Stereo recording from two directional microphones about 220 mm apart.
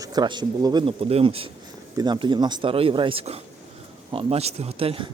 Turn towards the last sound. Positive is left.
turn(degrees=-25)  # may be behind; listen again after turning